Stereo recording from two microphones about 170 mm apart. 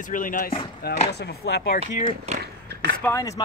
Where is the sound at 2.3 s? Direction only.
40° right (ahead or behind).